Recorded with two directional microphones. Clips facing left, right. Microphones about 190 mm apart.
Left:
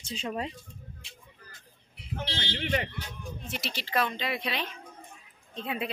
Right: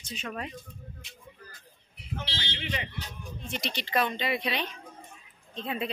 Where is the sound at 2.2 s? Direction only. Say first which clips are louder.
Left 7 dB; 50° left (ahead or behind).